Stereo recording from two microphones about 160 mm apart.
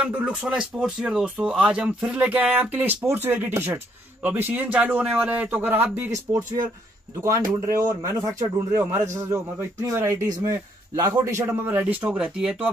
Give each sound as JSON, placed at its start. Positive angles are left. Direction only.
{"t": 0.0, "sound": "speech", "side_deg": -5}
{"t": 7.6, "sound": "speech", "side_deg": -20}